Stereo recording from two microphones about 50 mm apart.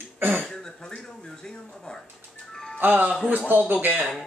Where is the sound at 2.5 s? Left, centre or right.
Centre.